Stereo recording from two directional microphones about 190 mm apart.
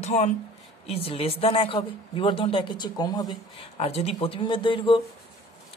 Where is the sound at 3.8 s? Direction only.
30° left (ahead or behind).